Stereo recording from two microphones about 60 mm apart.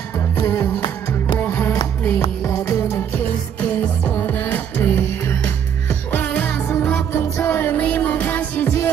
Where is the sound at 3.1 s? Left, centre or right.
Left.